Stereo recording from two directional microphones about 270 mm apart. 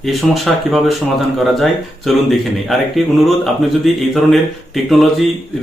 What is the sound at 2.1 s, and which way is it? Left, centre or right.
A man's voice, centre.